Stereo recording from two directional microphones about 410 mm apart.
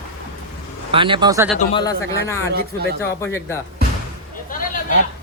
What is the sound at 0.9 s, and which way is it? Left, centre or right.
Speech, centre.